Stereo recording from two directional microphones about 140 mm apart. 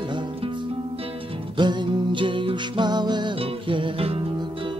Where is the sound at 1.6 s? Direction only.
35° right (ahead or behind).